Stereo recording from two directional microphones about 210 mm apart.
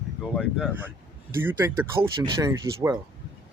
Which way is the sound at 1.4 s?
10° right (ahead or behind).